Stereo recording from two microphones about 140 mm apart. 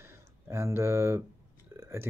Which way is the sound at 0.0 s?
15° right (ahead or behind).